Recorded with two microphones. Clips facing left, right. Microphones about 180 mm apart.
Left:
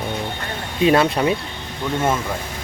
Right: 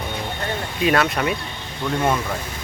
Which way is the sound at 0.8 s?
25° left (ahead or behind).